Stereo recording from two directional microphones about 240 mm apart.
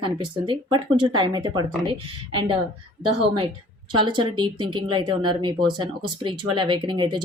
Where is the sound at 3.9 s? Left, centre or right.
Centre.